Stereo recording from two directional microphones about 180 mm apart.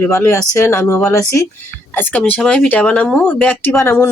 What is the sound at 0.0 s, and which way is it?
Speech, 15° left (ahead or behind).